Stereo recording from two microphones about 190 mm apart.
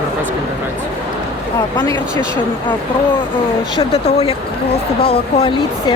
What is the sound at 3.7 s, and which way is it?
Speech, 30° left (ahead or behind).